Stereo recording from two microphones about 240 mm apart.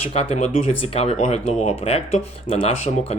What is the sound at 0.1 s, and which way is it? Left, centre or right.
Speech, left.